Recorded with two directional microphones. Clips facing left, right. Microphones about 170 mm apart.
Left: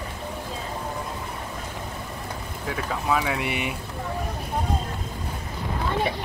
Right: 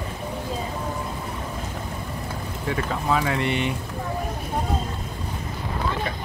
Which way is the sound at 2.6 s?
Centre (ahead or behind).